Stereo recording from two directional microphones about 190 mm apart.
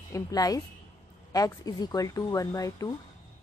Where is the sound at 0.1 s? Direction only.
20° left (ahead or behind).